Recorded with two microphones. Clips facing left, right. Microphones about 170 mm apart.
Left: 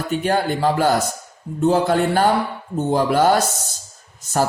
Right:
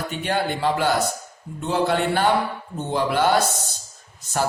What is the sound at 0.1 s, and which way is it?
A man's voice, 45° left (ahead or behind).